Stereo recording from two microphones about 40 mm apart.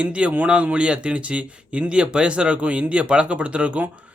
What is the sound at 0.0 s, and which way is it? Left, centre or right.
Speech, right.